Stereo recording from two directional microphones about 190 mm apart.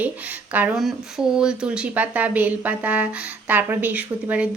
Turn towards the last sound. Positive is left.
turn(degrees=-10)  # may be behind; listen again after turning